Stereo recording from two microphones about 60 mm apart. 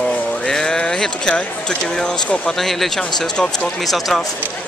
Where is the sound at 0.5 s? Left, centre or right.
Centre.